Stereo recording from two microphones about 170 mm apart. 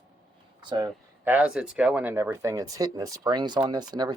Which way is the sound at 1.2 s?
10° right (ahead or behind).